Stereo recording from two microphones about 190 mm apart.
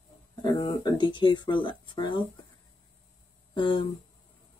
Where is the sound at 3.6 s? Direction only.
25° left (ahead or behind).